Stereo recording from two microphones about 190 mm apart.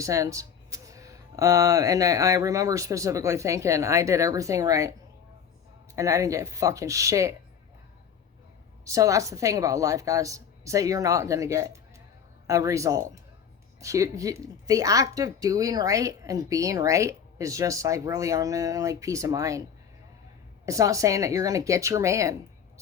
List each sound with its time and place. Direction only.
0.0 s speech: 15° right (ahead or behind)
6.0 s speech: 15° right (ahead or behind)
8.8 s speech: 15° right (ahead or behind)
20.7 s speech: 15° right (ahead or behind)